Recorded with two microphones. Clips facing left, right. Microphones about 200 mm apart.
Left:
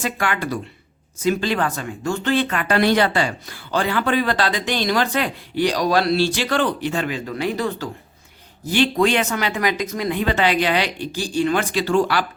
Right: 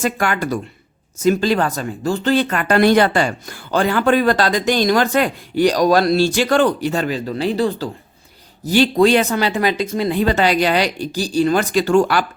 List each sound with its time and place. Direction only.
0.0 s speech: 45° right (ahead or behind)